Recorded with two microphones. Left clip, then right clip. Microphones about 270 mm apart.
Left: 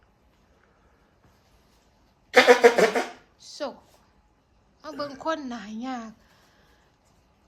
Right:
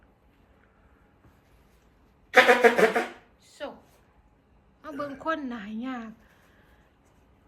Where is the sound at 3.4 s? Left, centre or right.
Centre.